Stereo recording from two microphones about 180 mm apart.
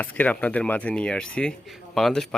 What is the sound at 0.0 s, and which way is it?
Speech, 10° left (ahead or behind).